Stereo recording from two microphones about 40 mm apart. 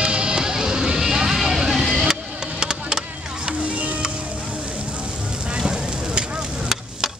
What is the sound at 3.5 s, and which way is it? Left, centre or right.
Music, right.